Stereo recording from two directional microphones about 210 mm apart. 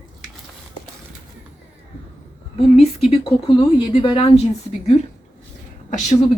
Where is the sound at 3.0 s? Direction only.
25° left (ahead or behind).